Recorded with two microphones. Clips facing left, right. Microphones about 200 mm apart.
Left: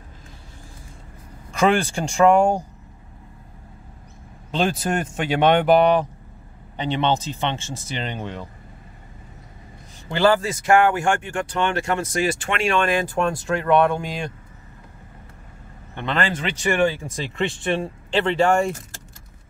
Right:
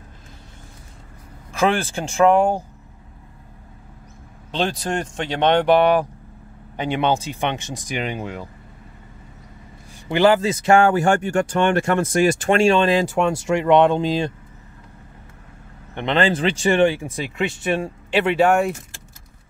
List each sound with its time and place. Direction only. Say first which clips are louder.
1.5 s speech: left 1 dB; 5° right (ahead or behind)
4.5 s speech: left 1 dB; centre (ahead or behind)
10.0 s speech: right 3 dB; 15° right (ahead or behind); by 12.5 s 45° right (ahead or behind)
12.5 s speech: right 5 dB; 25° right (ahead or behind)
13.0 s speech: right 3 dB; 75° right (ahead or behind)
13.6 s speech: right 3 dB; 15° right (ahead or behind)
15.9 s speech: right 5 dB; 20° right (ahead or behind)
16.3 s speech: right 5 dB; 30° right (ahead or behind)
16.8 s speech: right 3 dB; 10° right (ahead or behind)